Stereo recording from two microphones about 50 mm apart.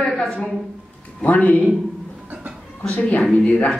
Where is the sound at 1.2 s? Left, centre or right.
Left.